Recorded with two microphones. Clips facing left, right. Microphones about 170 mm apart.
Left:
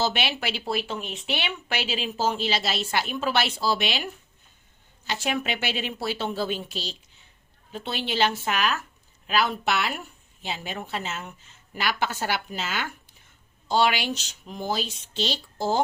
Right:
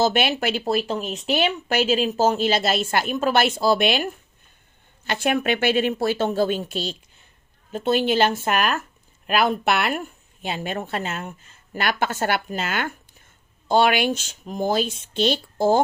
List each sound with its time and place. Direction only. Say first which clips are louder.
0.0 s speech: right 6 dB; 50° right (ahead or behind)